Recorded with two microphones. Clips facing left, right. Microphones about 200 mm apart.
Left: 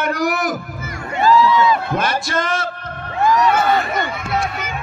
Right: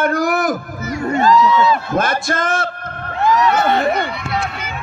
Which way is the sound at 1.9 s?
50° right (ahead or behind).